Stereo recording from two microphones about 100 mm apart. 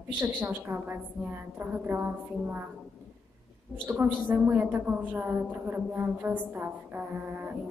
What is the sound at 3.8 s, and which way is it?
A man's voice, 20° right (ahead or behind).